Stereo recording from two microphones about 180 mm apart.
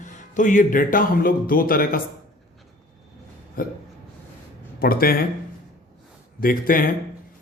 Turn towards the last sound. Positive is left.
turn(degrees=50)  # may be behind; listen again after turning